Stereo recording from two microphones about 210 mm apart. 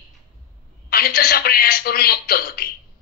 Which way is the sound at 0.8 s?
45° left (ahead or behind).